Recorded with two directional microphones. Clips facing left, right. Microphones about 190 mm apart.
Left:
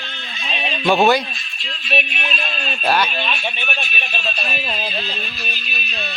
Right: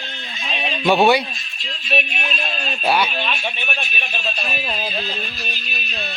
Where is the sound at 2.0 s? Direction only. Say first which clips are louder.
Even; 40° right (ahead or behind).